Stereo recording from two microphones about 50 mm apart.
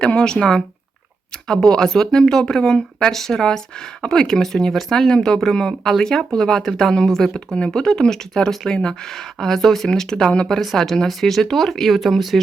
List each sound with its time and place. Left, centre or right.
0.0 s speech: centre
10.6 s speech: centre